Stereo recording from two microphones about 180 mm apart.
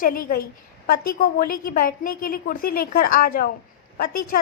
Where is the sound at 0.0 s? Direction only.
55° left (ahead or behind).